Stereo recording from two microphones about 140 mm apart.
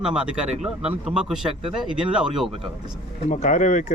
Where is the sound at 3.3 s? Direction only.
60° left (ahead or behind).